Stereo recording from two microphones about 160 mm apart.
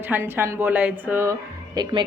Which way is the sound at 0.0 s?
15° right (ahead or behind).